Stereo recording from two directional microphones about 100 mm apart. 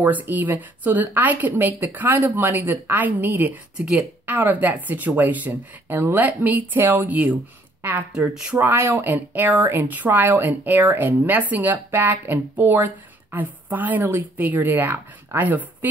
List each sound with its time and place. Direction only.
0.0 s a woman's voice: 15° right (ahead or behind)
8.5 s speech: 20° right (ahead or behind)